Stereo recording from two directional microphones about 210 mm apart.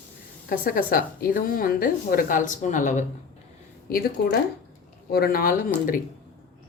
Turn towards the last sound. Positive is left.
turn(degrees=40)  # may be behind; listen again after turning